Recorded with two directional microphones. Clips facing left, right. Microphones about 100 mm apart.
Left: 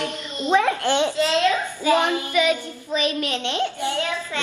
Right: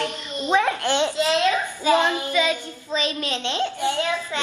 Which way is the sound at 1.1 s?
20° right (ahead or behind).